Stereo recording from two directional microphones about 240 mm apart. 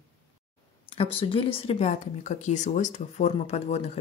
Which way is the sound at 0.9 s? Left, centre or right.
Left.